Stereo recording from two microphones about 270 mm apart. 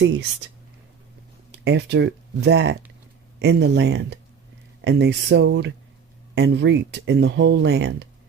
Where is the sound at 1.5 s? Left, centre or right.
Right.